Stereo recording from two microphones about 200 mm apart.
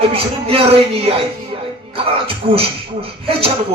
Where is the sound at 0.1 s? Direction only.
30° right (ahead or behind).